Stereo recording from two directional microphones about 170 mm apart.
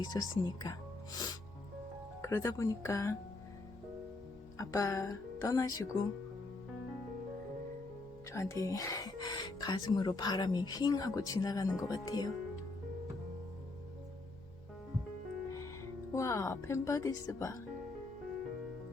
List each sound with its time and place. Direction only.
0.0 s speech: 25° left (ahead or behind)
4.5 s speech: 20° left (ahead or behind)
8.3 s speech: 20° left (ahead or behind)
16.1 s speech: 15° left (ahead or behind)